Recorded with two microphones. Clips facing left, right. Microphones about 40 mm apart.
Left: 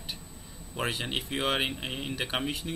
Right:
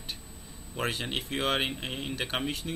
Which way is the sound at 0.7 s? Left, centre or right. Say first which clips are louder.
Even; centre.